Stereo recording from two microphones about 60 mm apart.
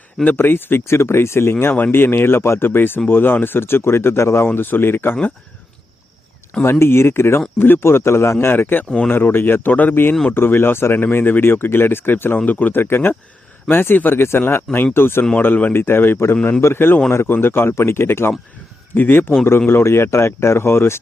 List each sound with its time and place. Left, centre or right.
0.3 s speech: left
4.4 s speech: left
6.7 s speech: left
18.9 s speech: left